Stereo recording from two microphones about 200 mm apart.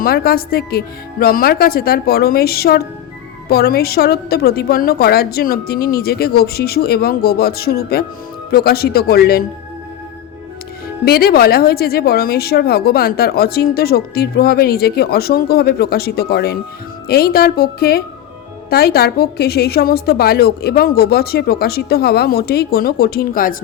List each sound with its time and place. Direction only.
0.0 s speech: 50° left (ahead or behind)
11.0 s speech: 50° left (ahead or behind)